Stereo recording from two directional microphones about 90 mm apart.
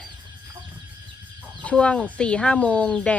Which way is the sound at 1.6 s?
15° left (ahead or behind).